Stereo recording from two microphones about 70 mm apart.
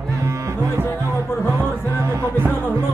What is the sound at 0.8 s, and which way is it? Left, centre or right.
Music, left.